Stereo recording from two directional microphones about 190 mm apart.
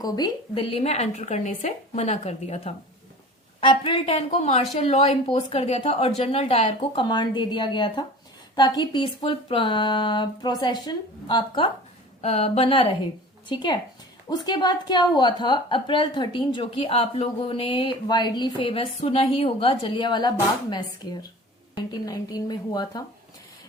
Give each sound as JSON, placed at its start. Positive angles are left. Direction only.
{"t": 0.0, "sound": "a woman's voice", "side_deg": 25}